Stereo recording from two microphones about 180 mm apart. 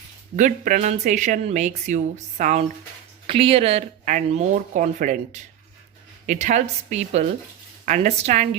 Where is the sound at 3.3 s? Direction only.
30° right (ahead or behind).